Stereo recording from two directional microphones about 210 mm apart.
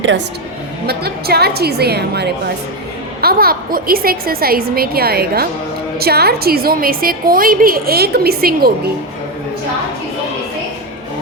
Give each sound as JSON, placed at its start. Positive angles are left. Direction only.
{"t": 0.9, "sound": "a woman's voice", "side_deg": -50}